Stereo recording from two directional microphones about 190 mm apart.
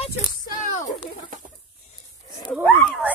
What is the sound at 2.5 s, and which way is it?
Speech, 10° left (ahead or behind).